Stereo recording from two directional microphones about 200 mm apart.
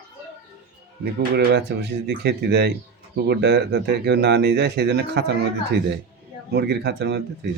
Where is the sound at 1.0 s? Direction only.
55° right (ahead or behind).